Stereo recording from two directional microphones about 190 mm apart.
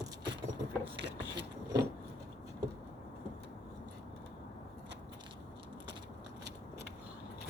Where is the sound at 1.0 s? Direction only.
65° right (ahead or behind).